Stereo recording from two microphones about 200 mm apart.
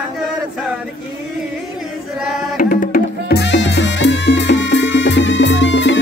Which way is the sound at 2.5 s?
45° left (ahead or behind).